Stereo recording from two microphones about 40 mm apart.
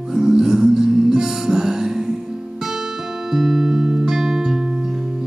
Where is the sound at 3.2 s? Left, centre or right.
Centre.